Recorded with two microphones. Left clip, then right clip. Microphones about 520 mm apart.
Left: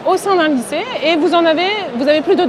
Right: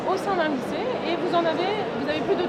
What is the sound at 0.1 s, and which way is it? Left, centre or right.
Speech, left.